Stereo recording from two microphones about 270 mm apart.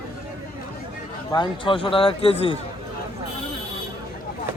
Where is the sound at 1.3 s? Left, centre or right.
Centre.